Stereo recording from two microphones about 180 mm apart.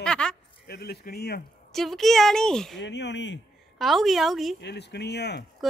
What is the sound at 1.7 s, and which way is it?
A woman's voice, centre (ahead or behind).